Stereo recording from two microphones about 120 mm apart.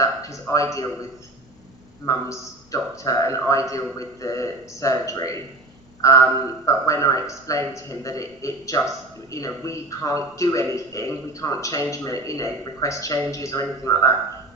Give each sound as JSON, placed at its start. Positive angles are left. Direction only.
{"t": 0.0, "sound": "a man's voice", "side_deg": 25}
{"t": 2.0, "sound": "a man's voice", "side_deg": 25}